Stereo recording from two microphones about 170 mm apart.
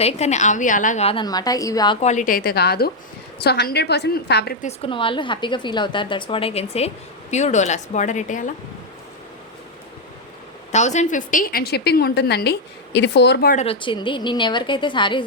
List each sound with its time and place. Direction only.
0.0 s a woman's voice: 40° left (ahead or behind)
1.0 s a woman's voice: 25° left (ahead or behind)
2.0 s a woman's voice: 45° left (ahead or behind); by 4.5 s 70° left (ahead or behind)
4.6 s a woman's voice: 30° left (ahead or behind)
10.7 s a woman's voice: 45° left (ahead or behind); by 13.5 s 90° left
13.7 s a woman's voice: 30° left (ahead or behind)